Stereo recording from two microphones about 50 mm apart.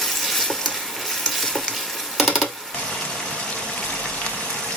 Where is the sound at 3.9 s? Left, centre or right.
Left.